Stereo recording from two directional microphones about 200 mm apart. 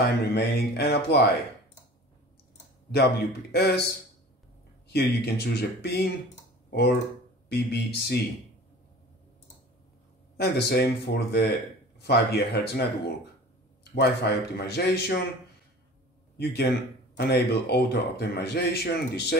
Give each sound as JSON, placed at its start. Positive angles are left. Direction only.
{"t": 0.2, "sound": "a man's voice", "side_deg": 55}
{"t": 2.9, "sound": "a man's voice", "side_deg": 55}
{"t": 10.3, "sound": "a man's voice", "side_deg": 55}
{"t": 13.9, "sound": "a man's voice", "side_deg": 55}
{"t": 16.3, "sound": "a man's voice", "side_deg": 55}